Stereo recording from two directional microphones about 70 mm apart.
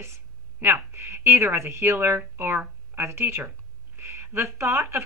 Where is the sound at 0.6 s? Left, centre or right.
Right.